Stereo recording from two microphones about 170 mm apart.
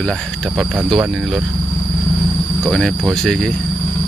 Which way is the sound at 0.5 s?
5° right (ahead or behind).